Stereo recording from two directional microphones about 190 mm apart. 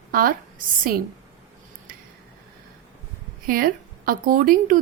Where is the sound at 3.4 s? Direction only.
50° right (ahead or behind).